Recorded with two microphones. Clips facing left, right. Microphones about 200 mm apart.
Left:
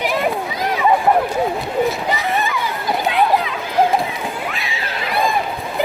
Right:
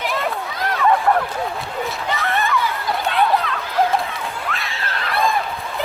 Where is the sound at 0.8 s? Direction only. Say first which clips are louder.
Left 2 dB; 15° left (ahead or behind).